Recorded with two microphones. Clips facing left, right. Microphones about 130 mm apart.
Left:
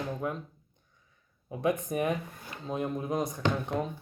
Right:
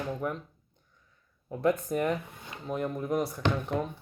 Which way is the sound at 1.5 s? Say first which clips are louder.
Right 2 dB; 15° left (ahead or behind).